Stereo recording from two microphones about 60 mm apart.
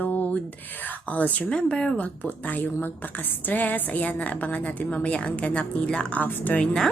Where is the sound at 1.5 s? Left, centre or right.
Centre.